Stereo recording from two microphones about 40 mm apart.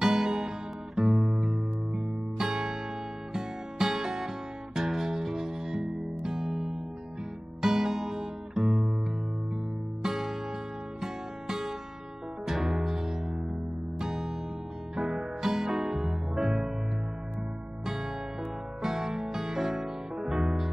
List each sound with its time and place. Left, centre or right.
0.0 s music: centre
1.1 s music: centre
2.0 s music: centre
10.0 s music: centre
18.8 s music: centre